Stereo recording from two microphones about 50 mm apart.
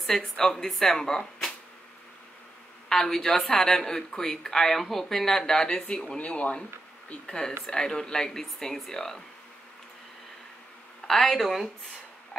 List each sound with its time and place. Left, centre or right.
0.0 s speech: centre
2.9 s speech: centre
11.1 s speech: centre